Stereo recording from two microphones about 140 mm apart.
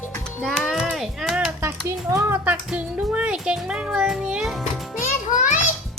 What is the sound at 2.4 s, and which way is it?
Music, 10° right (ahead or behind).